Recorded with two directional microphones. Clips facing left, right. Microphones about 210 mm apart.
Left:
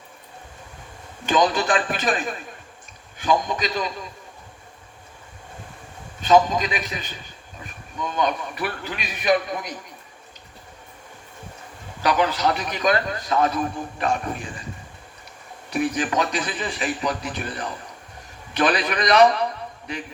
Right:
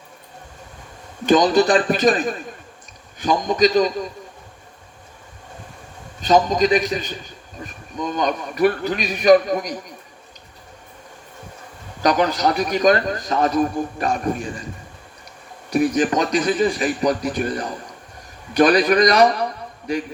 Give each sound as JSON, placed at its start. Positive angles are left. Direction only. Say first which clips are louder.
{"t": 1.3, "sound": "a man's voice", "louder": "right 6 dB", "side_deg": -40}
{"t": 6.2, "sound": "a man's voice", "louder": "right 2 dB", "side_deg": -40}
{"t": 12.0, "sound": "a man's voice", "louder": "right 3 dB", "side_deg": -40}
{"t": 15.7, "sound": "a man's voice", "louder": "right 5 dB", "side_deg": -40}